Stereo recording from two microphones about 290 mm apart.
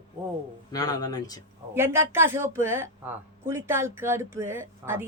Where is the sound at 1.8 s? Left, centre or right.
Centre.